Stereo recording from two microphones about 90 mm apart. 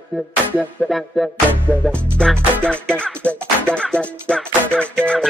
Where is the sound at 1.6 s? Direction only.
20° right (ahead or behind).